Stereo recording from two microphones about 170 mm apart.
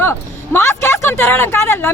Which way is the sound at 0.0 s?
15° left (ahead or behind).